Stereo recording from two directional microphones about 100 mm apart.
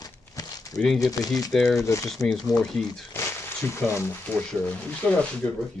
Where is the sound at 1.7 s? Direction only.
30° left (ahead or behind).